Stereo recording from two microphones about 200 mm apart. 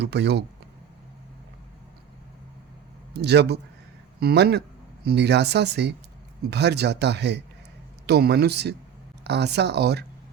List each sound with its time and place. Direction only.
0.0 s speech: 55° right (ahead or behind)
3.1 s speech: 55° right (ahead or behind)